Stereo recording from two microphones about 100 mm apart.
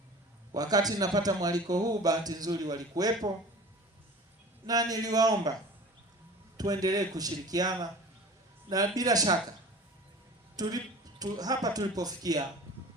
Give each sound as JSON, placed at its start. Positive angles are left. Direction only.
{"t": 0.5, "sound": "a man's voice", "side_deg": -40}
{"t": 4.6, "sound": "a man's voice", "side_deg": -40}
{"t": 6.6, "sound": "a man's voice", "side_deg": -40}
{"t": 10.6, "sound": "a man's voice", "side_deg": -40}